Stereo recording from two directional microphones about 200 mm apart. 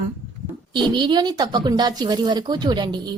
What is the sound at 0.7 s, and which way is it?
A woman's voice, 25° right (ahead or behind).